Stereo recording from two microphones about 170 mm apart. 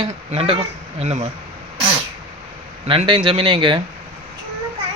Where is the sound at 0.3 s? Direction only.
35° right (ahead or behind).